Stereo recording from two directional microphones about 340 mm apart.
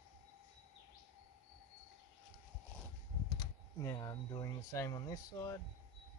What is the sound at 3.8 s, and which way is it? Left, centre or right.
Speech, centre.